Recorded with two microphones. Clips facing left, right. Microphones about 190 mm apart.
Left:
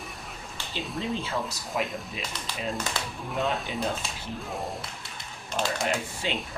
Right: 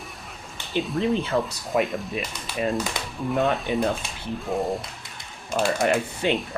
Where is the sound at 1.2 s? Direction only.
60° right (ahead or behind).